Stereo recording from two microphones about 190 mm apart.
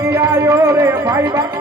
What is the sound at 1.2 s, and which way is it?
Speech, 20° right (ahead or behind).